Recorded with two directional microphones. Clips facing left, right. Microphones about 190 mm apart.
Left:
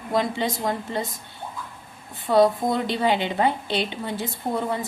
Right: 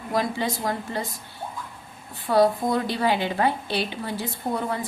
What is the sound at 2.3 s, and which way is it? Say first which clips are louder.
A woman's voice: left 1 dB; 20° left (ahead or behind).